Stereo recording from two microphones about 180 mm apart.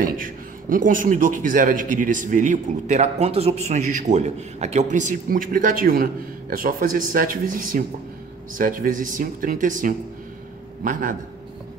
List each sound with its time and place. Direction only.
0.0 s a man's voice: 50° right (ahead or behind)